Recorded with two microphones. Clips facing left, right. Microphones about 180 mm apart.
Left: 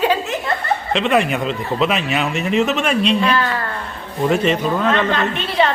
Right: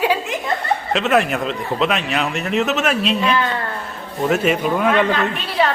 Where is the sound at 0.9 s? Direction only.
Centre (ahead or behind).